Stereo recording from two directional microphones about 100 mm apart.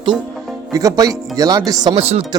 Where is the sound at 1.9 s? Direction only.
70° right (ahead or behind).